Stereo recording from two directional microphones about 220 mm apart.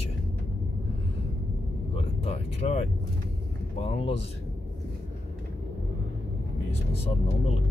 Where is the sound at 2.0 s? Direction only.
30° left (ahead or behind).